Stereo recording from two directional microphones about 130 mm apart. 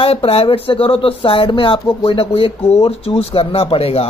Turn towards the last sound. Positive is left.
turn(degrees=50)  # may be behind; listen again after turning